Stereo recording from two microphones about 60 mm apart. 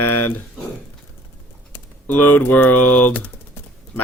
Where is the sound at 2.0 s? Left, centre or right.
Left.